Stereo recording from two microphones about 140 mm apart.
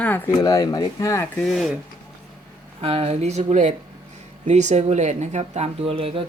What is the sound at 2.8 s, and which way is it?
Speech, 45° right (ahead or behind).